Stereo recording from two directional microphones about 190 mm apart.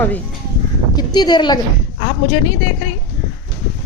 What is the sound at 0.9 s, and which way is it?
Speech, 20° left (ahead or behind).